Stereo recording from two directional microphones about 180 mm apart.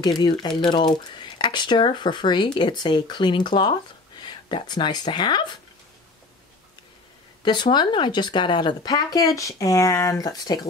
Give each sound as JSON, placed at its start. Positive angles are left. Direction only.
{"t": 0.0, "sound": "speech", "side_deg": 25}
{"t": 7.4, "sound": "speech", "side_deg": 25}